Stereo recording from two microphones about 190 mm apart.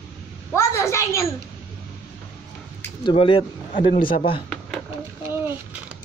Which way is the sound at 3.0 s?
25° left (ahead or behind).